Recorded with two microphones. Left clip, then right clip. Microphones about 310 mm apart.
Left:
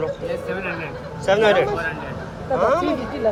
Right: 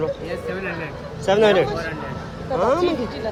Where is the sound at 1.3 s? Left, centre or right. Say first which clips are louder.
Even; centre.